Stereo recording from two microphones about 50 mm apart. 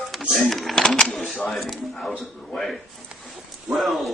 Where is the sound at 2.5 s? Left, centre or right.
Centre.